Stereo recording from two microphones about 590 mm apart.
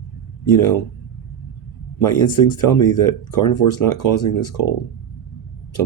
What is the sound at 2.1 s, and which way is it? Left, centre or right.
Speech, left.